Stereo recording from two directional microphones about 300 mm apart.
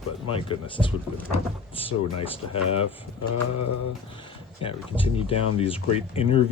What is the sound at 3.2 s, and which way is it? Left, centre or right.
Mantra, left.